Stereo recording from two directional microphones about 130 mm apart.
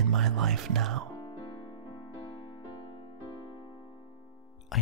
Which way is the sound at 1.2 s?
40° left (ahead or behind).